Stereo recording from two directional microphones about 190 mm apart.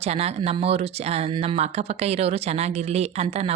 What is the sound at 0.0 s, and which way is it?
A woman's voice, 35° right (ahead or behind).